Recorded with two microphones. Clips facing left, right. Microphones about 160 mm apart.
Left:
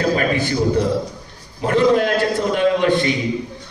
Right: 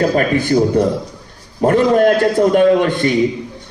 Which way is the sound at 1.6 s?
50° right (ahead or behind).